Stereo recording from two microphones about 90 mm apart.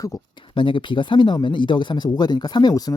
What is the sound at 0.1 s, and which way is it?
Speech, 40° left (ahead or behind).